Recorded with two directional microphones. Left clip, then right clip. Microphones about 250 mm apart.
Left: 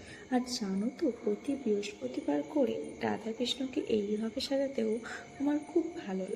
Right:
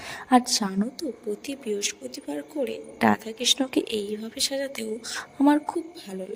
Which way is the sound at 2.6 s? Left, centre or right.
Right.